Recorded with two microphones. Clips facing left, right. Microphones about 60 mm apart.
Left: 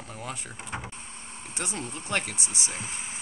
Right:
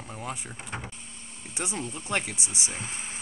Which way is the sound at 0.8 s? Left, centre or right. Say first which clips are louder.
Left 2 dB; left.